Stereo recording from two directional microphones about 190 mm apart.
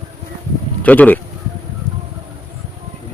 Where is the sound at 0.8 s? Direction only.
10° left (ahead or behind).